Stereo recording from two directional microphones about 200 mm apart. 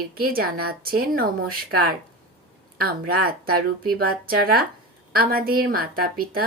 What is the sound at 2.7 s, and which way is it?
A woman's voice, 50° right (ahead or behind).